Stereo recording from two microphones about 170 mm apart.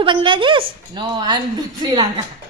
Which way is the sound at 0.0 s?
30° right (ahead or behind).